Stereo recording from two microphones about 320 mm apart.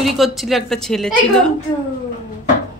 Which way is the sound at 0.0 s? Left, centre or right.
Centre.